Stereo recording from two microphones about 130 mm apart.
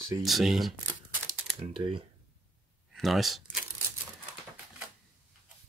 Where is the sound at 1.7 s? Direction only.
40° right (ahead or behind).